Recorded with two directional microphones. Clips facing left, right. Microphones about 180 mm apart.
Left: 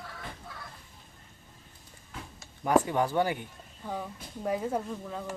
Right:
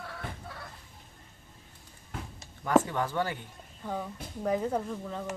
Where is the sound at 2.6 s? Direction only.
15° left (ahead or behind).